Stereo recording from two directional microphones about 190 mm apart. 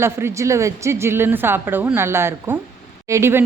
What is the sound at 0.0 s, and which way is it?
Speech, 15° right (ahead or behind).